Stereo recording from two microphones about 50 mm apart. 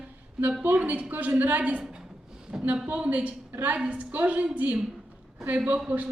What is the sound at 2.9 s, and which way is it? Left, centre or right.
A woman's voice, right.